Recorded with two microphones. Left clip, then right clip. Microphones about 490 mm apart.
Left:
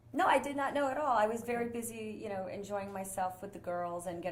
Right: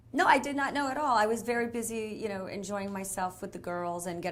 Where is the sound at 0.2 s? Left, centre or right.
Right.